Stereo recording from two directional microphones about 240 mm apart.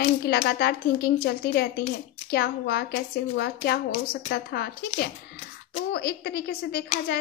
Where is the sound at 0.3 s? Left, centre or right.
Left.